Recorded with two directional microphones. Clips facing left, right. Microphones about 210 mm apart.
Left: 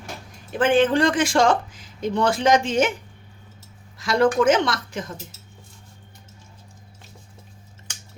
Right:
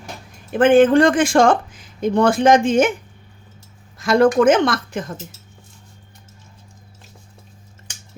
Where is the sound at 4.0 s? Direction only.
50° right (ahead or behind).